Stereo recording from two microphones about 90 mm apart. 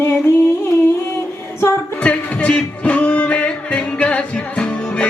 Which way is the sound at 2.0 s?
15° left (ahead or behind).